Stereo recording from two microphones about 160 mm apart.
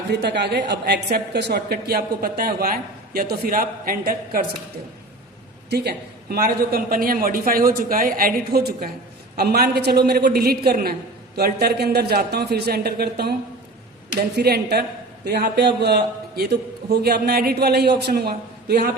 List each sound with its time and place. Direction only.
0.1 s a woman's voice: 90° right; by 4.4 s 65° right (ahead or behind)
5.7 s a man's voice: 85° right
14.3 s a man's voice: 85° right